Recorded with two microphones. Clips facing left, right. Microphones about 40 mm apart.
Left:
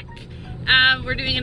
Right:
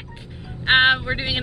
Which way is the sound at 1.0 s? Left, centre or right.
Centre.